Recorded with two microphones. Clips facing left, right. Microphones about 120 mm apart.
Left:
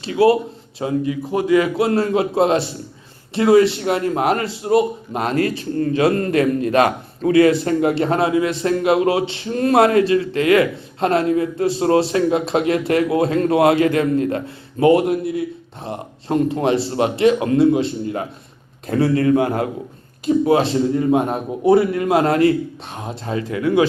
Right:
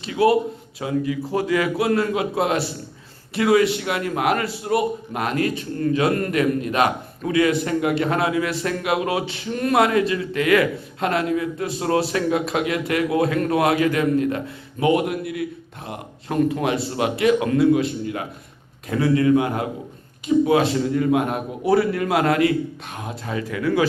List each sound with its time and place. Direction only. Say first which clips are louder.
0.0 s a man's voice: left 3 dB; 30° left (ahead or behind)